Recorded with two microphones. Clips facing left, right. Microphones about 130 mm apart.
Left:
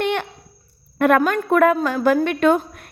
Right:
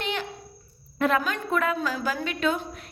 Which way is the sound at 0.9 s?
60° left (ahead or behind).